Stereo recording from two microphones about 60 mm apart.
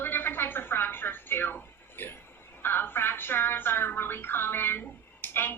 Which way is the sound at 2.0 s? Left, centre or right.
Left.